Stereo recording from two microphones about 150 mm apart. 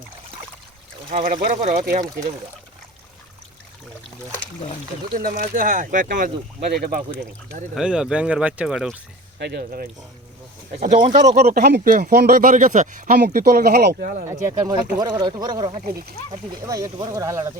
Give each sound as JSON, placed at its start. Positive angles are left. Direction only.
{"t": 1.6, "sound": "speech", "side_deg": -55}
{"t": 5.1, "sound": "speech", "side_deg": -65}
{"t": 7.8, "sound": "speech", "side_deg": -5}
{"t": 9.5, "sound": "speech", "side_deg": -90}
{"t": 10.7, "sound": "speech", "side_deg": -45}
{"t": 11.4, "sound": "a man's voice", "side_deg": -90}
{"t": 14.4, "sound": "speech", "side_deg": -25}
{"t": 15.8, "sound": "speech", "side_deg": -90}
{"t": 16.6, "sound": "speech", "side_deg": -25}